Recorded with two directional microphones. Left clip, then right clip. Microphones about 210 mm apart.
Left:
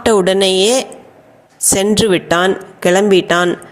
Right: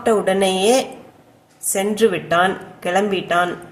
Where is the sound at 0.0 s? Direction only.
40° left (ahead or behind).